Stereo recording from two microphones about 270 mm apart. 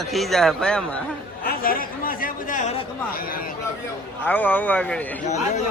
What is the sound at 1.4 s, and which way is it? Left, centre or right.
Speech, left.